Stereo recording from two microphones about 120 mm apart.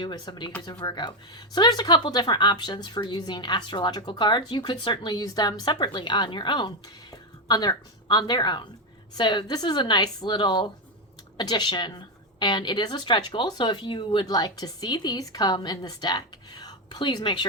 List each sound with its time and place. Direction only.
0.0 s speech: 40° left (ahead or behind)